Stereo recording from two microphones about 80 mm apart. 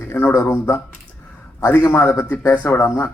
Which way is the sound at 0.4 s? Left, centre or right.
Left.